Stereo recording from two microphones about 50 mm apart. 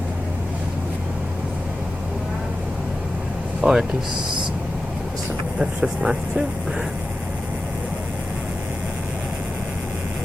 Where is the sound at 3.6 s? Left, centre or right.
Centre.